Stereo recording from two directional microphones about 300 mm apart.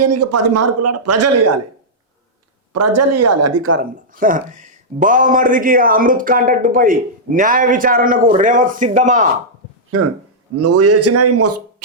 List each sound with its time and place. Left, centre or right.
0.0 s speech: right
2.7 s a man's voice: right
4.1 s speech: right
9.9 s a man's voice: right